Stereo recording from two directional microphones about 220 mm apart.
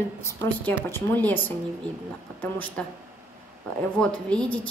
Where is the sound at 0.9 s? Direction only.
10° left (ahead or behind).